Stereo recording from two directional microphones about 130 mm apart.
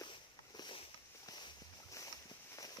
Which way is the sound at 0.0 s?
35° left (ahead or behind).